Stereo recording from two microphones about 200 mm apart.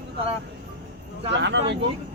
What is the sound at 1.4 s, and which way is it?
Speech, 60° right (ahead or behind).